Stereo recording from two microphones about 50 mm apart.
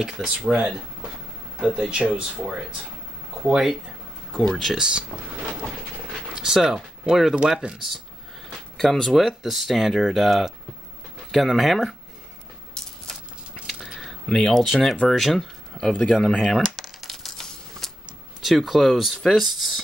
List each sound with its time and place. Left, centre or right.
0.0 s speech: centre
4.4 s speech: centre
4.7 s speech: centre
6.3 s speech: centre
8.5 s a sound: centre
9.1 s speech: centre
12.8 s coin: centre
13.7 s a sound: centre
14.2 s speech: centre
16.3 s shuffling cards: centre
18.4 s speech: centre